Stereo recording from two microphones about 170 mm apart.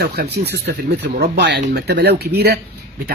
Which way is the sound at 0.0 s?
75° right (ahead or behind).